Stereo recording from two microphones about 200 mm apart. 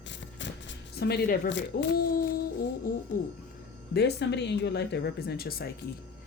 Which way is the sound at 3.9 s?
55° left (ahead or behind).